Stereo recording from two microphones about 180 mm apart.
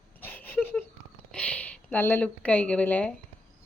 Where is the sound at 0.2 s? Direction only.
10° left (ahead or behind).